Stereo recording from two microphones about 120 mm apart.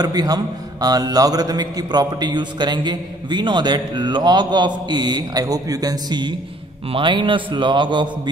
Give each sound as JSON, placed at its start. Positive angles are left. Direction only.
{"t": 0.0, "sound": "a man's voice", "side_deg": -35}